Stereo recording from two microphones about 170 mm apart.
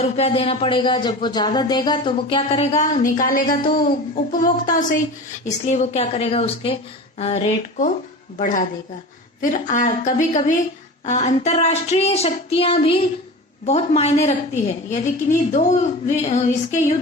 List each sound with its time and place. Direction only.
0.0 s speech: 35° left (ahead or behind); by 3.6 s 55° left (ahead or behind)
3.6 s speech: 30° left (ahead or behind)
3.8 s a woman's voice: 55° left (ahead or behind)